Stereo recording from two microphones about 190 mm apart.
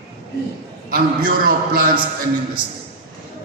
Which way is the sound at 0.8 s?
50° right (ahead or behind).